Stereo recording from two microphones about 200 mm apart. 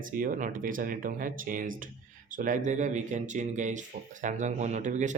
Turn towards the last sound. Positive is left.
turn(degrees=-35)  # may be behind; listen again after turning